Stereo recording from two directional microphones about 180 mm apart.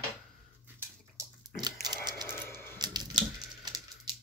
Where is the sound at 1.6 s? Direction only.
25° right (ahead or behind).